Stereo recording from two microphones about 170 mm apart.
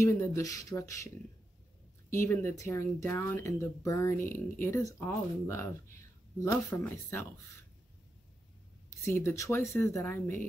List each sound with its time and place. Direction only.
0.0 s speech: 20° left (ahead or behind)
9.0 s speech: 15° left (ahead or behind)